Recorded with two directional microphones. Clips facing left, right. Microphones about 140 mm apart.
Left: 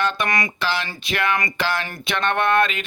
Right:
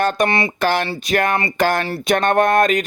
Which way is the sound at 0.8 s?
35° right (ahead or behind).